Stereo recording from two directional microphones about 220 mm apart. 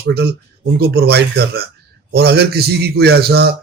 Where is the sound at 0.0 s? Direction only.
45° right (ahead or behind).